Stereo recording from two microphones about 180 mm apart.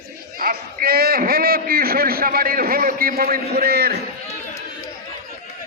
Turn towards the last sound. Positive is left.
turn(degrees=40)  # may be behind; listen again after turning